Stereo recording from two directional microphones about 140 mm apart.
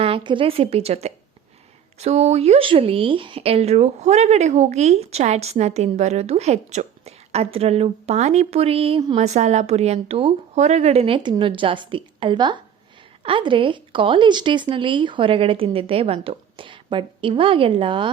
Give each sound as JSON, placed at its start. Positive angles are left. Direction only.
{"t": 0.0, "sound": "speech", "side_deg": -40}
{"t": 9.1, "sound": "speech", "side_deg": -55}